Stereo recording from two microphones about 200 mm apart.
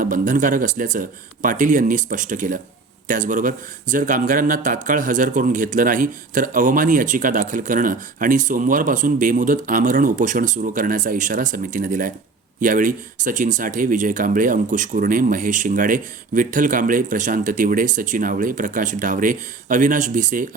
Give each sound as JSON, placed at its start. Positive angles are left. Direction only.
{"t": 0.0, "sound": "speech", "side_deg": -40}